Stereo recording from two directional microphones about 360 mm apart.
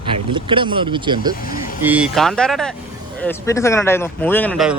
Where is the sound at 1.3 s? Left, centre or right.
Left.